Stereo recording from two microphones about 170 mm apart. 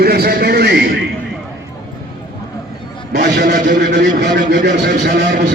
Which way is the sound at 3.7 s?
90° right.